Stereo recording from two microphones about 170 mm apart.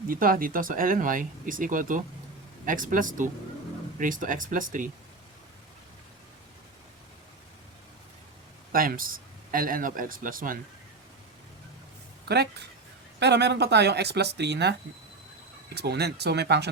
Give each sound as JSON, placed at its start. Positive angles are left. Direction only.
{"t": 0.1, "sound": "speech", "side_deg": -55}
{"t": 8.7, "sound": "speech", "side_deg": -55}
{"t": 12.3, "sound": "speech", "side_deg": -75}
{"t": 13.1, "sound": "speech", "side_deg": -90}